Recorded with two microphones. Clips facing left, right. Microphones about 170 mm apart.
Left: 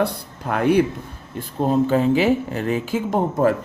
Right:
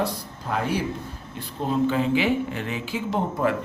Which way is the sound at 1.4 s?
45° left (ahead or behind).